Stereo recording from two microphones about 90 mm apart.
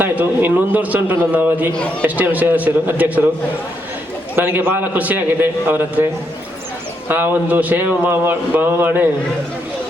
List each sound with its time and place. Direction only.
0.0 s a man's voice: 20° right (ahead or behind)
4.4 s a man's voice: 25° right (ahead or behind)
7.1 s a man's voice: 20° right (ahead or behind)